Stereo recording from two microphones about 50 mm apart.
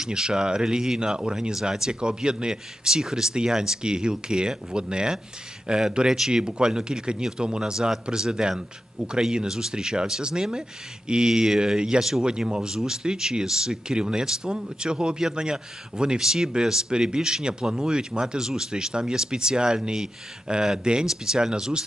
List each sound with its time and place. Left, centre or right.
0.0 s speech: centre